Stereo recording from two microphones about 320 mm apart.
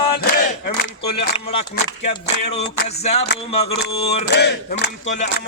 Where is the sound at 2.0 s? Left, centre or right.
Centre.